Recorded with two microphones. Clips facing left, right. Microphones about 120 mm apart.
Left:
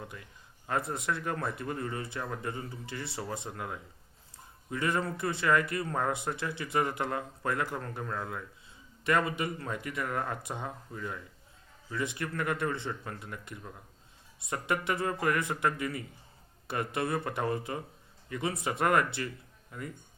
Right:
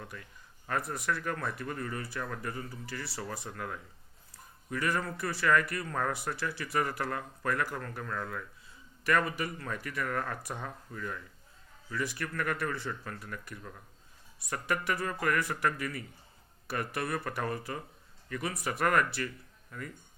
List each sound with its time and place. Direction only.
0.0 s speech: 20° left (ahead or behind)